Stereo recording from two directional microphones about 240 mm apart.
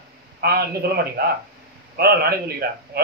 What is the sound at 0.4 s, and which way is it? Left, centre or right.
A man's voice, right.